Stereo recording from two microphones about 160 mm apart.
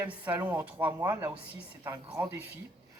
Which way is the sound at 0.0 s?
10° right (ahead or behind).